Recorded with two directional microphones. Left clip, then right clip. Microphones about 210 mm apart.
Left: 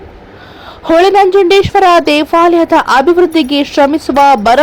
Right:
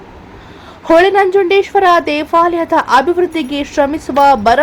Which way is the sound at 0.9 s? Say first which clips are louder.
Left 2 dB; 15° left (ahead or behind).